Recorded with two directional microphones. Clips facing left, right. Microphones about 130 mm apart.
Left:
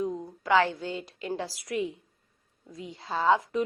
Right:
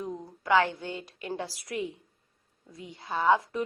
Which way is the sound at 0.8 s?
20° right (ahead or behind).